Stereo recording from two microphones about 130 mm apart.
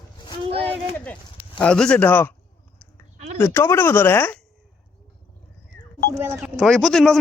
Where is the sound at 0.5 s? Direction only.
15° left (ahead or behind).